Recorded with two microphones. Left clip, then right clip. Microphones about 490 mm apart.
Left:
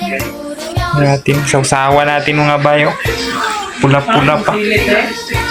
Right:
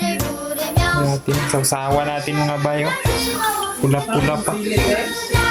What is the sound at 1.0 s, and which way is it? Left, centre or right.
Speech, right.